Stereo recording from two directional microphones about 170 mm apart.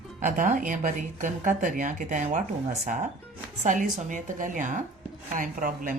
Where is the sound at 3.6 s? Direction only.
45° right (ahead or behind).